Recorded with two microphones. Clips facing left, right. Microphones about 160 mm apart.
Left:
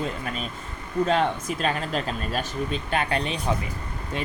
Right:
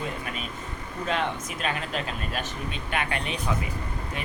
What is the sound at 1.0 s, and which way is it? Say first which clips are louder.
Speech: left 3 dB; 35° left (ahead or behind).